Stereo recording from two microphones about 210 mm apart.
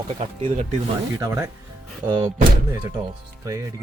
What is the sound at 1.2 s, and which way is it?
Speech, 15° right (ahead or behind).